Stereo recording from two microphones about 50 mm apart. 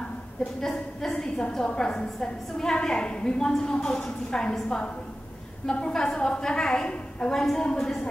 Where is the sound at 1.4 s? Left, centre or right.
Centre.